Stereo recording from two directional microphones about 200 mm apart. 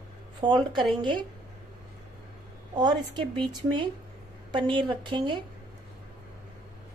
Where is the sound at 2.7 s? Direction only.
20° right (ahead or behind).